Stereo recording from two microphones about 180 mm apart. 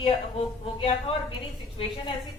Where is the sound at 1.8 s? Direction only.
30° left (ahead or behind).